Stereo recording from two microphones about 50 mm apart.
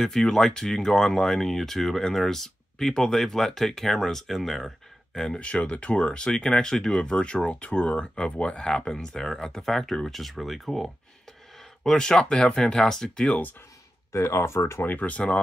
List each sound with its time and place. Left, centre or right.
0.0 s speech: centre
5.4 s speech: left
13.3 s speech: left
14.1 s speech: left
14.9 s speech: left